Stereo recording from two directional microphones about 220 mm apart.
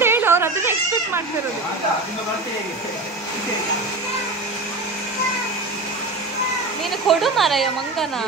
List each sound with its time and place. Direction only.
0.0 s baby cry: 10° right (ahead or behind)
7.1 s speech: centre (ahead or behind)